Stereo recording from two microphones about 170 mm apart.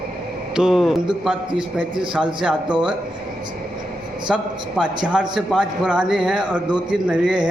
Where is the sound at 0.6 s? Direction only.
5° right (ahead or behind).